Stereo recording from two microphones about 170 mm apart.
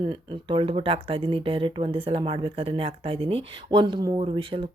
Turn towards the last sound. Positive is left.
turn(degrees=-30)  # may be behind; listen again after turning